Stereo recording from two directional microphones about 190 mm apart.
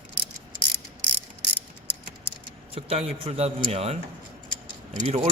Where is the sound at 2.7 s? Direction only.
30° right (ahead or behind).